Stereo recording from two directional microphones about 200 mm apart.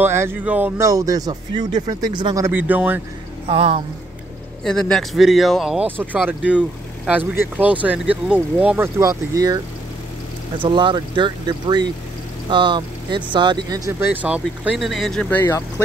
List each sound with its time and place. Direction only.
0.0 s speech: 10° right (ahead or behind)
3.4 s speech: 30° right (ahead or behind)
4.6 s speech: 5° left (ahead or behind); by 9.6 s 15° right (ahead or behind)
10.6 s speech: 25° right (ahead or behind); by 15.6 s 10° left (ahead or behind)